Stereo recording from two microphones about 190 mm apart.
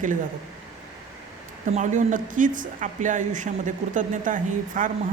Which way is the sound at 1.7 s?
40° right (ahead or behind).